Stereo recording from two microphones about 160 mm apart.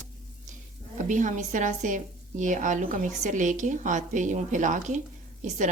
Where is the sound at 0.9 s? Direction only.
50° right (ahead or behind).